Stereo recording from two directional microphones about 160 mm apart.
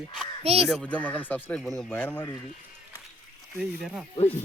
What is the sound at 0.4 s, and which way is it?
Speech, 40° right (ahead or behind).